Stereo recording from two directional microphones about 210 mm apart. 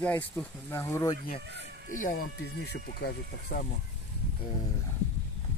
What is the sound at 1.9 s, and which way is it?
Speech, 40° left (ahead or behind).